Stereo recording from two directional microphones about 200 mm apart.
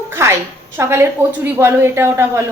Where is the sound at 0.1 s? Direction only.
10° right (ahead or behind).